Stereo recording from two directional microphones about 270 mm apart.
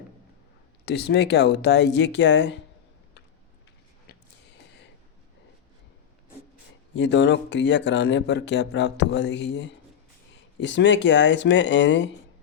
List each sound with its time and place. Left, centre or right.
0.9 s speech: left
4.5 s a sound: left
6.9 s speech: left